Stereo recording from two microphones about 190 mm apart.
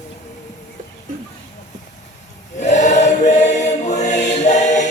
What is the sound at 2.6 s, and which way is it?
Choir, 40° left (ahead or behind).